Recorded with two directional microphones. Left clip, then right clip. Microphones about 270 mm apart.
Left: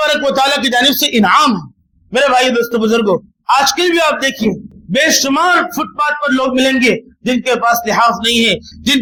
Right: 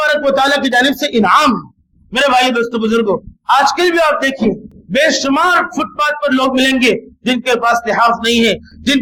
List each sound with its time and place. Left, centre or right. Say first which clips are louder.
0.0 s a man's voice: even; left